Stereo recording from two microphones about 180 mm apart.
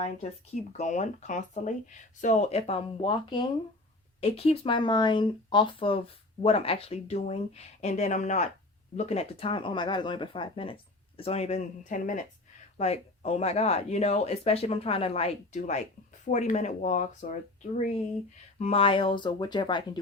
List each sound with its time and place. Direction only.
0.0 s speech: 35° left (ahead or behind)
18.6 s speech: 30° left (ahead or behind)